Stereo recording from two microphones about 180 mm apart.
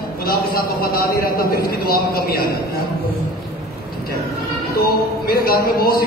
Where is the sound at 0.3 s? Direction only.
55° left (ahead or behind).